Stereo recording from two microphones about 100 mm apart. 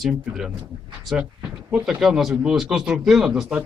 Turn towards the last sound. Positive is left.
turn(degrees=-5)  # may be behind; listen again after turning